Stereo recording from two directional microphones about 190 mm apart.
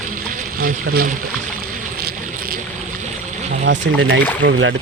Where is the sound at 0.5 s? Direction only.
50° right (ahead or behind).